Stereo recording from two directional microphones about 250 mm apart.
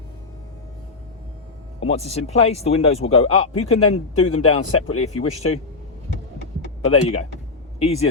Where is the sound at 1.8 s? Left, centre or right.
Left.